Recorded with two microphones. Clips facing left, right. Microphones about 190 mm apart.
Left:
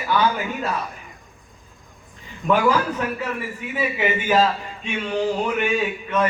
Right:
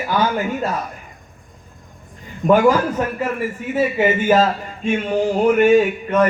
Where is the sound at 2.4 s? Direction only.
45° right (ahead or behind).